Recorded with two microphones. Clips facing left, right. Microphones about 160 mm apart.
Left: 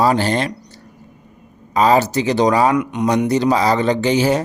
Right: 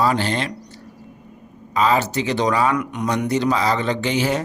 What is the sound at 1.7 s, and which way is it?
Speech, 40° left (ahead or behind).